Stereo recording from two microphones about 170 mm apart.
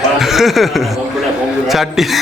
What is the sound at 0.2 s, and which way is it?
Chuckle, centre (ahead or behind).